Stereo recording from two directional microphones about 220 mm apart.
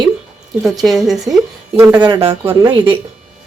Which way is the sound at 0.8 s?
Centre (ahead or behind).